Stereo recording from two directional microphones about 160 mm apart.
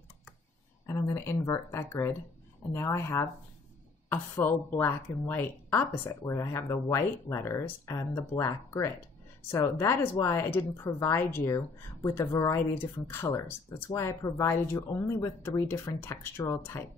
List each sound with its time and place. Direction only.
0.8 s speech: 20° left (ahead or behind)